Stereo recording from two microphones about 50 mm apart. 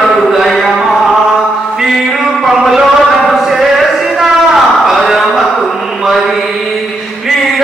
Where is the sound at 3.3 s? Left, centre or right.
Centre.